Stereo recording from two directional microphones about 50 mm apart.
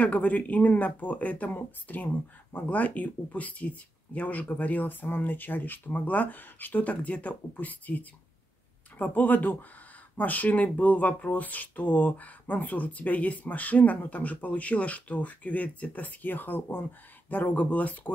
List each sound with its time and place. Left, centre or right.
0.0 s speech: left